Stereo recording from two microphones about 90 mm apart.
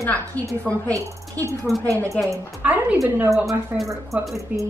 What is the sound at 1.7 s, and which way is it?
Speech, centre (ahead or behind).